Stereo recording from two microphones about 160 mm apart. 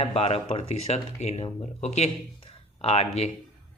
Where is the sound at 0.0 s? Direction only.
40° left (ahead or behind).